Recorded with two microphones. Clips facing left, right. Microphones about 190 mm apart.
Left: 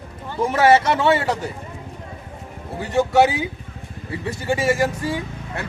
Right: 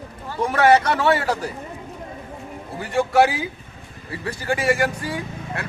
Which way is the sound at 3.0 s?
Centre (ahead or behind).